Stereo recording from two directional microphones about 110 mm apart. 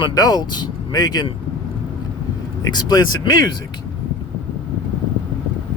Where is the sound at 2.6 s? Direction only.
40° left (ahead or behind).